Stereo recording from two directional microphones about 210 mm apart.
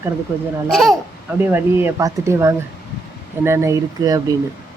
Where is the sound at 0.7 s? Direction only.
Centre (ahead or behind).